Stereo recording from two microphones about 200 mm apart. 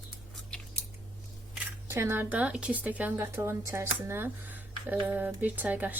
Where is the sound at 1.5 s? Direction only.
15° right (ahead or behind).